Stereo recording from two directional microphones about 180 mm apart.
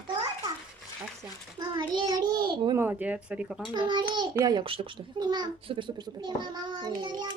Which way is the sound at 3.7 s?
25° right (ahead or behind).